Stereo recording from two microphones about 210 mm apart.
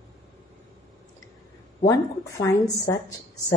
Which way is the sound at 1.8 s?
15° left (ahead or behind).